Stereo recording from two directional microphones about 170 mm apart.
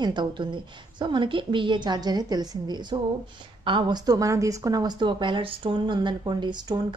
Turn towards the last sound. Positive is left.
turn(degrees=-25)  # may be behind; listen again after turning